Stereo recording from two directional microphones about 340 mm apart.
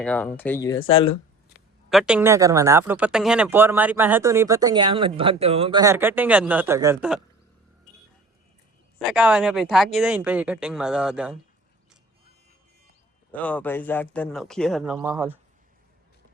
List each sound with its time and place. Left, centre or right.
0.0 s speech: centre
1.9 s speech: centre
9.0 s speech: centre
13.3 s speech: centre